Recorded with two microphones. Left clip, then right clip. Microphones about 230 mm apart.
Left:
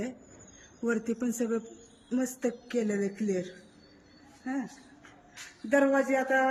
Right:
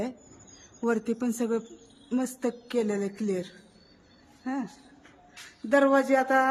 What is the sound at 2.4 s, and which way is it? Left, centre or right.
Speech, centre.